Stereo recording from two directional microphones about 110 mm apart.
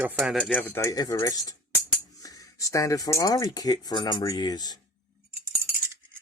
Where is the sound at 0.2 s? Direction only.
Centre (ahead or behind).